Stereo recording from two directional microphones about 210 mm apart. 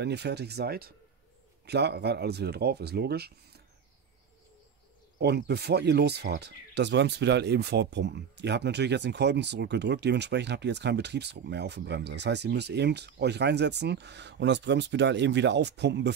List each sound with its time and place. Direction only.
0.0 s speech: 55° right (ahead or behind)
5.2 s speech: 50° right (ahead or behind)